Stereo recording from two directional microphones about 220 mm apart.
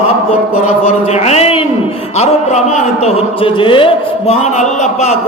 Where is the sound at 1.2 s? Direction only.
30° left (ahead or behind).